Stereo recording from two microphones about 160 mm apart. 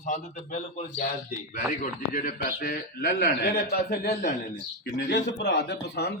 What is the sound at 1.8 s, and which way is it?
A man's voice, 55° left (ahead or behind).